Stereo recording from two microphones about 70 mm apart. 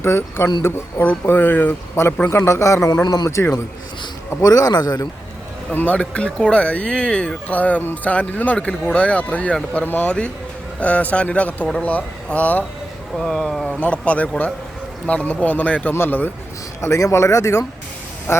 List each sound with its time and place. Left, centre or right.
0.0 s a man's voice: left
1.0 s speech: left
2.0 s a man's voice: left
2.9 s speech: left
3.2 s a man's voice: left
4.4 s speech: left
5.7 s speech: left
13.1 s speech: centre
13.7 s speech: centre
16.8 s speech: left